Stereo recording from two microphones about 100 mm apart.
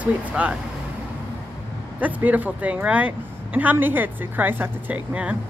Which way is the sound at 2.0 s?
15° right (ahead or behind).